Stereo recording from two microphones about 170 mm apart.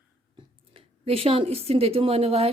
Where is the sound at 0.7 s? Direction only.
35° right (ahead or behind).